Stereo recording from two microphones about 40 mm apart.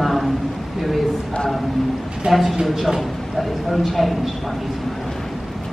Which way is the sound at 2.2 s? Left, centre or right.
Right.